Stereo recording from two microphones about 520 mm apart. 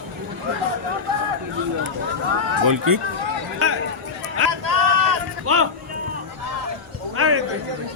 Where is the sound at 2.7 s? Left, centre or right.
Right.